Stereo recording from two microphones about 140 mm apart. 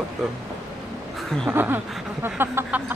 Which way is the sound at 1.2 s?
5° left (ahead or behind).